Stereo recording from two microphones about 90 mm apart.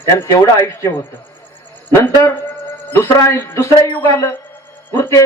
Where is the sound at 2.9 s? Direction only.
35° left (ahead or behind).